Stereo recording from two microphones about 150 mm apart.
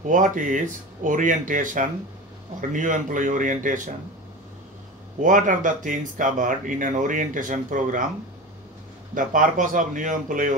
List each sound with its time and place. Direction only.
0.0 s speech: 60° right (ahead or behind)
5.2 s speech: 60° right (ahead or behind)
9.1 s speech: 60° right (ahead or behind)